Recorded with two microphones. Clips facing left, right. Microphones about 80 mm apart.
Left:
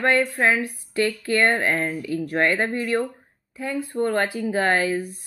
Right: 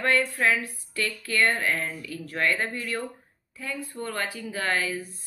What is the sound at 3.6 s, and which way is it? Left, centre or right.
A woman's voice, left.